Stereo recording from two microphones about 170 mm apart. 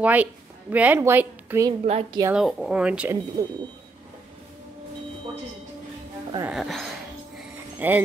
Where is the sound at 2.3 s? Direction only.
Centre (ahead or behind).